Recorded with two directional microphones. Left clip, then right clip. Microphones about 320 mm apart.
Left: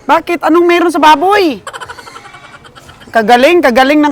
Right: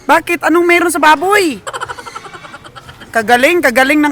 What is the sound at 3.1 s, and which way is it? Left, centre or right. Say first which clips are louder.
Speech: left 3 dB; centre.